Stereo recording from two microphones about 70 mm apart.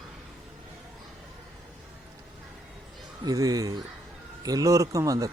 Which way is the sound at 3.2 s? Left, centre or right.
Right.